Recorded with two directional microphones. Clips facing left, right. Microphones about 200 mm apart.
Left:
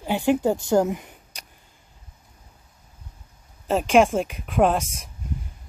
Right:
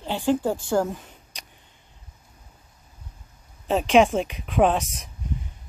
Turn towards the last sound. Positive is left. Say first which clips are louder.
# even
turn(degrees=0)  # may be behind; listen again after turning